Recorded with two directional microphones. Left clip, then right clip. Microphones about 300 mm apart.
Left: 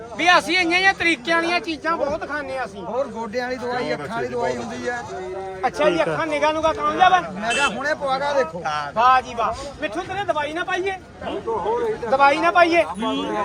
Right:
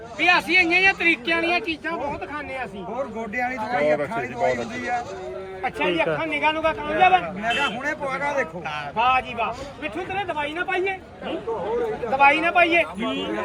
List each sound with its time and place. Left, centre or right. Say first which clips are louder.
0.2 s a man's voice: left 1 dB; centre
3.2 s speech: even; centre
5.6 s a man's voice: left 4 dB; centre
7.5 s speech: left 5 dB; centre
8.6 s a man's voice: left 4 dB; centre
12.1 s a man's voice: left 2 dB; centre